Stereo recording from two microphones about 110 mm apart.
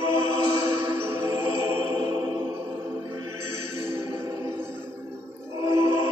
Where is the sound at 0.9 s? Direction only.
20° right (ahead or behind).